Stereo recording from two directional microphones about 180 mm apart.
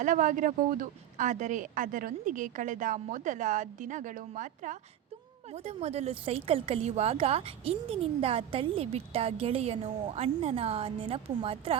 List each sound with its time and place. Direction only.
0.0 s speech: 45° right (ahead or behind)